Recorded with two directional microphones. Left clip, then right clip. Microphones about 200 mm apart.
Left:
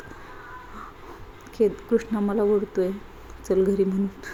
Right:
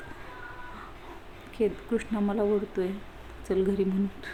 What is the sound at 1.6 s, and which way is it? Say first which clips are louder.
Speech: left 6 dB; 10° left (ahead or behind).